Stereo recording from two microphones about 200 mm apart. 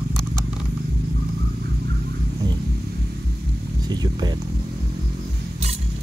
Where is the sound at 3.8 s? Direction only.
20° right (ahead or behind).